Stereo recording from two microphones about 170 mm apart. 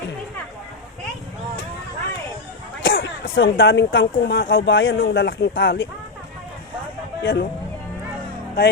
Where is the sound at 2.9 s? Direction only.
75° left (ahead or behind).